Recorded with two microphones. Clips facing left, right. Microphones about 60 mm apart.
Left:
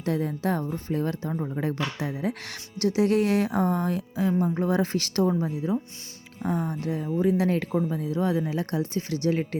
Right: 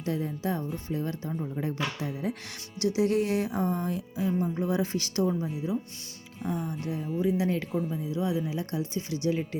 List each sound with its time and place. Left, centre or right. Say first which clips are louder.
0.0 s speech: left 4 dB; left
2.8 s speech: left 3 dB; left
4.4 s speech: left 4 dB; left